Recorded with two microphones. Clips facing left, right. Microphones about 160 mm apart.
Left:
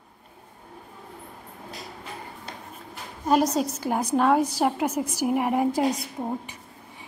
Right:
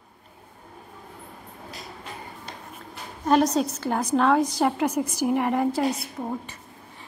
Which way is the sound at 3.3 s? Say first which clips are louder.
Right 1 dB; 5° left (ahead or behind).